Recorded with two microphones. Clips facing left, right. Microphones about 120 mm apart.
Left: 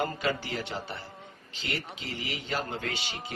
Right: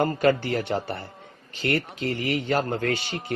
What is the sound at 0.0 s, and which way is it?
A man's voice, 55° right (ahead or behind).